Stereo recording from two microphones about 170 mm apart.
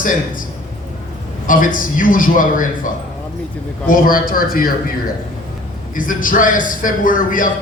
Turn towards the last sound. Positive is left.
turn(degrees=50)  # may be behind; listen again after turning